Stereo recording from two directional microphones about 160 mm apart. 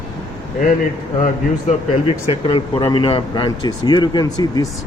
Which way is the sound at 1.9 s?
35° left (ahead or behind).